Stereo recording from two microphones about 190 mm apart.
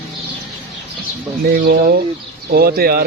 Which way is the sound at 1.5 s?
55° right (ahead or behind).